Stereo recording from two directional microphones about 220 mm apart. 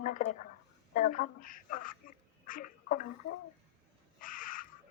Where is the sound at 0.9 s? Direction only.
35° left (ahead or behind).